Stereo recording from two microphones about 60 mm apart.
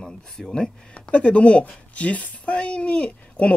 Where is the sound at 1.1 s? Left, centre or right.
Centre.